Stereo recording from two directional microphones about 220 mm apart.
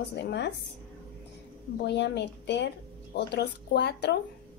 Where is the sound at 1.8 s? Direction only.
50° left (ahead or behind).